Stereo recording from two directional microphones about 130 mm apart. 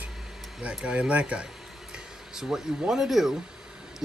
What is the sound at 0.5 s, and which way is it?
Speech, 5° right (ahead or behind).